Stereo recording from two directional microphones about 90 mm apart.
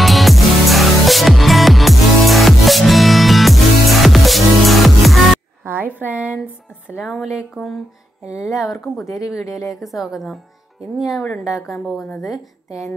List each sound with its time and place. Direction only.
0.0 s music: centre (ahead or behind)
5.7 s a sound: 20° right (ahead or behind)
7.0 s a woman's voice: centre (ahead or behind)